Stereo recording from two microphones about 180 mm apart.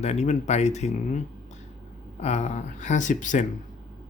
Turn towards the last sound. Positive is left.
turn(degrees=45)  # may be behind; listen again after turning